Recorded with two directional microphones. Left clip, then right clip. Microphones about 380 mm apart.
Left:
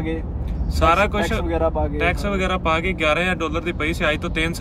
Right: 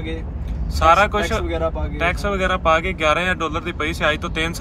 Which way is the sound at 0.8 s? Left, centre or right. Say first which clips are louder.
Right 3 dB; centre.